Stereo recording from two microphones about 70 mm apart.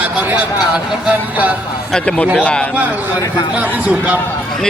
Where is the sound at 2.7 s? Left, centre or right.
Right.